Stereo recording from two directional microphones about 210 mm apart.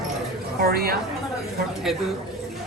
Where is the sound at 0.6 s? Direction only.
50° right (ahead or behind).